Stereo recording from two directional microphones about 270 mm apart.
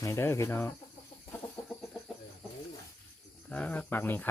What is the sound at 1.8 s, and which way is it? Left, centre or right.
Chicken, centre.